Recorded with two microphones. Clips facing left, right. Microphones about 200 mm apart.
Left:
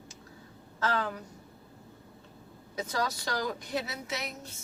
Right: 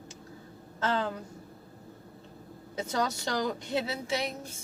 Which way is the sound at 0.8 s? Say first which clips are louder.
Right 1 dB; 25° right (ahead or behind).